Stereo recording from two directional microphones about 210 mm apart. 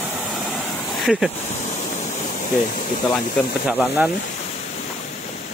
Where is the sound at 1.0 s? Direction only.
Centre (ahead or behind).